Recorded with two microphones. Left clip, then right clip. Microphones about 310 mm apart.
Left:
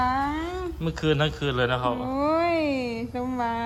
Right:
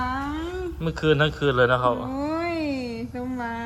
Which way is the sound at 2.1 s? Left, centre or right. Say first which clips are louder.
Left 4 dB; centre.